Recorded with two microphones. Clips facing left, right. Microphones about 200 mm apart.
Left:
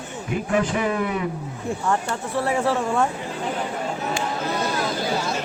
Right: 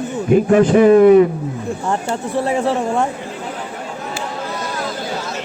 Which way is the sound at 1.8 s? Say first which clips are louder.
Right 3 dB; 20° right (ahead or behind).